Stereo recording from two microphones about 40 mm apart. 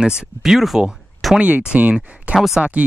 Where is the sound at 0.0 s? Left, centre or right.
Centre.